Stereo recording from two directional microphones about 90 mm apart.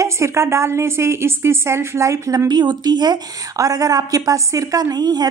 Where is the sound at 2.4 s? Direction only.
50° right (ahead or behind).